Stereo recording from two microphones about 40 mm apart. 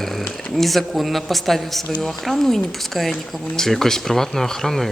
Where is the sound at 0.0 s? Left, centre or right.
Centre.